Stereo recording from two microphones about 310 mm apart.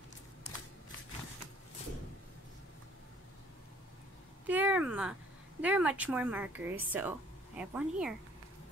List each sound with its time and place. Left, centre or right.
4.5 s speech: centre